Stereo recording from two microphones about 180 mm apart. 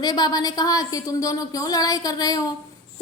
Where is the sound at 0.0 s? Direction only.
25° left (ahead or behind).